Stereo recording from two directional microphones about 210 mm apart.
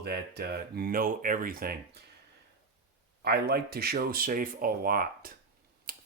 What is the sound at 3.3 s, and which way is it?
Speech, 50° right (ahead or behind).